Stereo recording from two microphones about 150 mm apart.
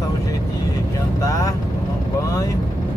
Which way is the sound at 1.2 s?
20° left (ahead or behind).